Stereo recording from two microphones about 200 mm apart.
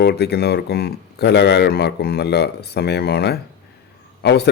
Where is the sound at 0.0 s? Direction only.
55° left (ahead or behind).